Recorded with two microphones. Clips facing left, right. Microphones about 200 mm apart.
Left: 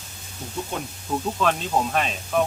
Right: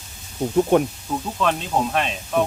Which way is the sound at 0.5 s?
60° right (ahead or behind).